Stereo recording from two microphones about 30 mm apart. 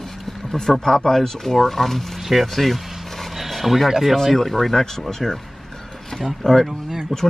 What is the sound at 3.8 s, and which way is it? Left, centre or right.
Speech, centre.